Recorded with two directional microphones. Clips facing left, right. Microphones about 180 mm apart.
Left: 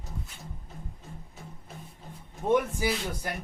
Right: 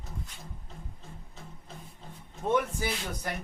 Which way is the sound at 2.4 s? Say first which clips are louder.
Left 3 dB; 15° left (ahead or behind).